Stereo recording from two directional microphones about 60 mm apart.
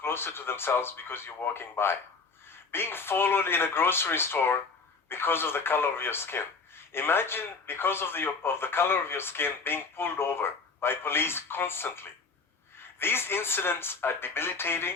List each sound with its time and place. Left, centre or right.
0.0 s a man's voice: left